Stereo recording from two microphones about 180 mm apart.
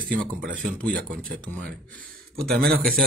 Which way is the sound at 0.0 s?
5° left (ahead or behind).